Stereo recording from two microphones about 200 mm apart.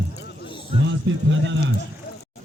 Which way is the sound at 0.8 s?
65° right (ahead or behind).